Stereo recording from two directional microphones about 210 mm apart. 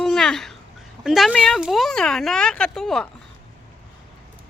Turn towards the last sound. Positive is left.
turn(degrees=0)  # may be behind; listen again after turning